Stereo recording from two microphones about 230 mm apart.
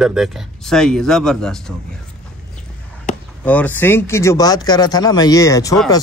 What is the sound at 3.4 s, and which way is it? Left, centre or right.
Speech, centre.